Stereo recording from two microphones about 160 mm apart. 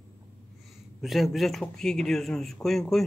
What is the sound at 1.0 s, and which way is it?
Speech, centre (ahead or behind).